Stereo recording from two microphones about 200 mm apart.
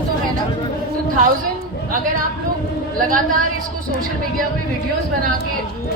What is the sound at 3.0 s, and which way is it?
Speech, 45° right (ahead or behind).